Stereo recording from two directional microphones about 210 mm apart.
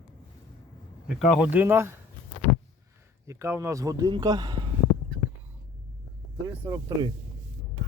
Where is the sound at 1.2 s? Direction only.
Centre (ahead or behind).